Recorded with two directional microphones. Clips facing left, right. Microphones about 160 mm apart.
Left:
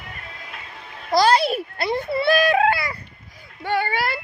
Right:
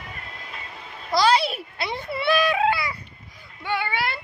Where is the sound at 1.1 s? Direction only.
45° left (ahead or behind).